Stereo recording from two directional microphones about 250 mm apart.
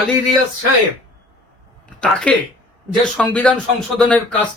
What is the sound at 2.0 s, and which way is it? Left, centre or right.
Speech, centre.